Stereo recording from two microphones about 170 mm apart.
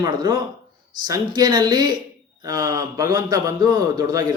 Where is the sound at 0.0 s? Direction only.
20° right (ahead or behind).